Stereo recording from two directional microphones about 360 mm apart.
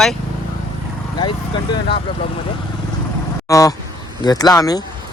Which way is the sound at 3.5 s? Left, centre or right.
Centre.